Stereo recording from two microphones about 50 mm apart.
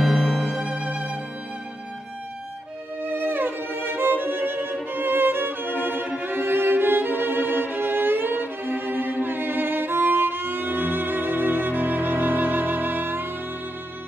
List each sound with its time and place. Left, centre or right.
0.0 s music: centre
3.0 s music: right
6.1 s violin: right